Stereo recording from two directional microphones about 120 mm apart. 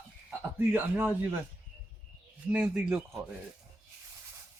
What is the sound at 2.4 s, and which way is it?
Speech, 10° right (ahead or behind).